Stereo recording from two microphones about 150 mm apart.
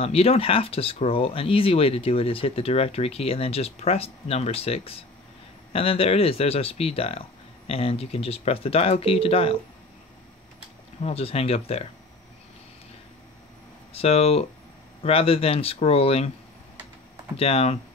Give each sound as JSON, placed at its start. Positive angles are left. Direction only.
{"t": 0.0, "sound": "speech", "side_deg": 40}
{"t": 11.0, "sound": "speech", "side_deg": 40}
{"t": 13.9, "sound": "speech", "side_deg": 40}
{"t": 17.4, "sound": "speech", "side_deg": 40}